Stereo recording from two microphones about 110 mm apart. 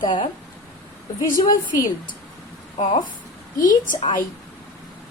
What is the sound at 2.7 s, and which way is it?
Speech, 60° left (ahead or behind).